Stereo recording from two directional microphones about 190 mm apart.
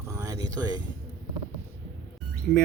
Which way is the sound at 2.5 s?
Centre (ahead or behind).